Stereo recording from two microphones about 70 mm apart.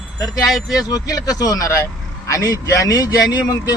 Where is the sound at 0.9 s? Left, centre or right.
Left.